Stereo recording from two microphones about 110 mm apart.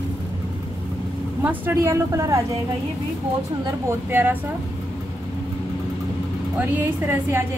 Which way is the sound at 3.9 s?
20° right (ahead or behind).